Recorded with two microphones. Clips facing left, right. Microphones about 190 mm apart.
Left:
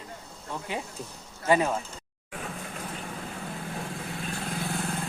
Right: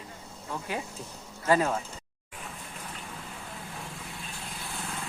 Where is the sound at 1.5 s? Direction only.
20° left (ahead or behind).